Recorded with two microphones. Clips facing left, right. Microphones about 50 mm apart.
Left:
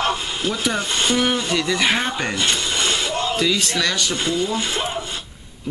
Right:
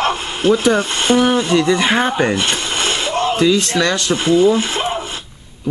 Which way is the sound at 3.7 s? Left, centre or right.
Right.